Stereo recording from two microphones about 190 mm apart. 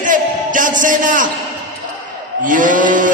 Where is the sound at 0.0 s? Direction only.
45° right (ahead or behind).